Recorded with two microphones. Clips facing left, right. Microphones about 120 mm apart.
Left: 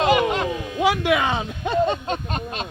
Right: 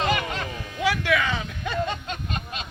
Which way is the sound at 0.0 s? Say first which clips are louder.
Left 7 dB; 65° left (ahead or behind).